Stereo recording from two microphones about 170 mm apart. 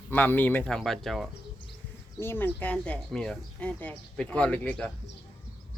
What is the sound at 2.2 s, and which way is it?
Speech, 15° left (ahead or behind).